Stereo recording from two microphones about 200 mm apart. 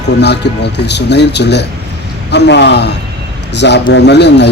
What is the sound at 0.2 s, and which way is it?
Speech, 55° left (ahead or behind).